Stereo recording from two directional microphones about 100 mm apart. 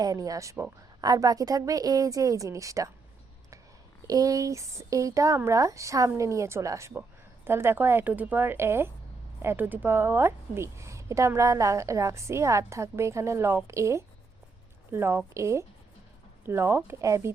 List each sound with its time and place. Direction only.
0.0 s a woman's voice: 40° right (ahead or behind)
4.0 s a woman's voice: 35° right (ahead or behind)